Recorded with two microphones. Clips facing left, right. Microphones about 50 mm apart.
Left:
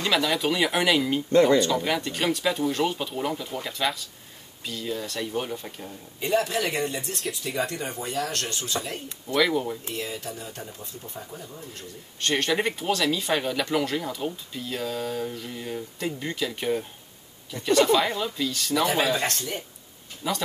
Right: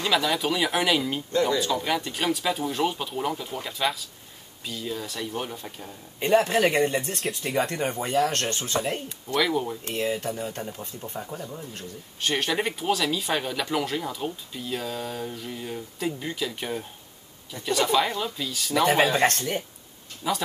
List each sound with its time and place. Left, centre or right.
0.0 s speech: centre
6.1 s speech: right
9.3 s speech: centre
9.9 s speech: right
12.2 s speech: centre
18.8 s speech: right
20.2 s speech: centre